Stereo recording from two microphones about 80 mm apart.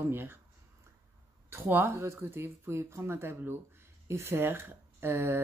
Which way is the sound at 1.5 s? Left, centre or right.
Right.